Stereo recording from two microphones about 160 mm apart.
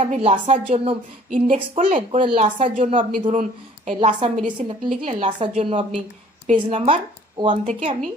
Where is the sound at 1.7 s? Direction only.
40° right (ahead or behind).